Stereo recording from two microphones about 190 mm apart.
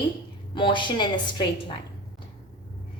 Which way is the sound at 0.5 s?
25° left (ahead or behind).